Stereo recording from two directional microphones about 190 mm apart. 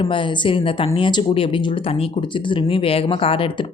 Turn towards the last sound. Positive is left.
turn(degrees=30)  # may be behind; listen again after turning